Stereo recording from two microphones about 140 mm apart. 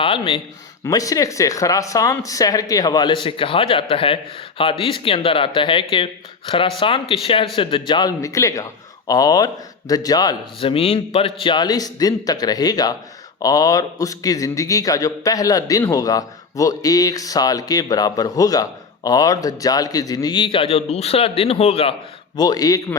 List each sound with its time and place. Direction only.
0.0 s speech: 40° left (ahead or behind)
0.9 s a man's voice: 25° left (ahead or behind)
10.6 s a man's voice: 45° left (ahead or behind)
22.4 s a man's voice: 25° left (ahead or behind)